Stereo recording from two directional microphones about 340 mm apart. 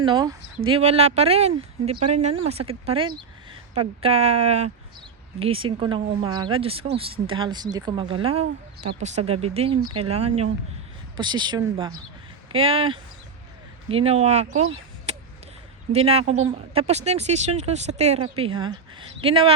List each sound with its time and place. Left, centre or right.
0.0 s speech: centre